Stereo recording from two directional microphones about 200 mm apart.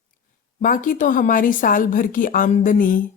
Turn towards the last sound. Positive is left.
turn(degrees=40)  # may be behind; listen again after turning